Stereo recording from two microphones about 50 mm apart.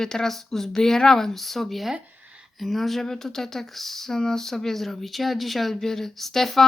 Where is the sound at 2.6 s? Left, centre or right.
Centre.